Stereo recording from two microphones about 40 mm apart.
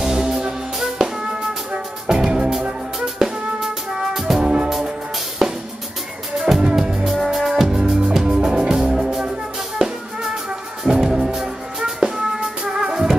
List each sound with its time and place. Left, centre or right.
0.0 s music: centre
4.4 s music: centre
5.4 s drum kit: centre
6.6 s music: centre
7.1 s music: centre